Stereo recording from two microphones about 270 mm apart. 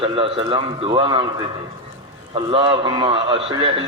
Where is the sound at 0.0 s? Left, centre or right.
Centre.